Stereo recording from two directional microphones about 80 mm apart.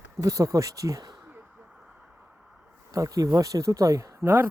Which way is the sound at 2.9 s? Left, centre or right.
Right.